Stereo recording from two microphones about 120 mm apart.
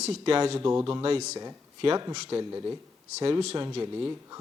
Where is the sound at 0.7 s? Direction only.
30° right (ahead or behind).